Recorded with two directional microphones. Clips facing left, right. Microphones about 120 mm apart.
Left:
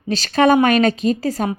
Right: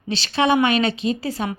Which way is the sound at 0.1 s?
45° left (ahead or behind).